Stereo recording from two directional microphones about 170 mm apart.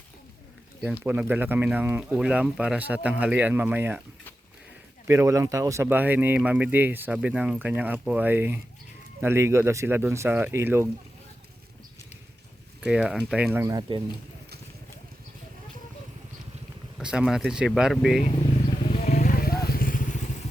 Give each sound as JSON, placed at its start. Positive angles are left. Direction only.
{"t": 1.0, "sound": "speech", "side_deg": -10}
{"t": 5.0, "sound": "speech", "side_deg": -15}
{"t": 12.8, "sound": "speech", "side_deg": -5}
{"t": 17.0, "sound": "speech", "side_deg": -5}
{"t": 18.8, "sound": "wild animals", "side_deg": 40}
{"t": 19.1, "sound": "vehicle", "side_deg": 60}